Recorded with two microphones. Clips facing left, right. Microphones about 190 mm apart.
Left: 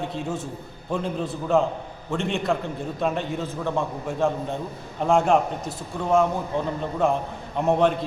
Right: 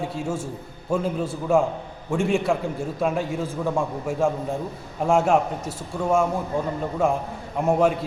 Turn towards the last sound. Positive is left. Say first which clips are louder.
# even
turn(degrees=-10)  # may be behind; listen again after turning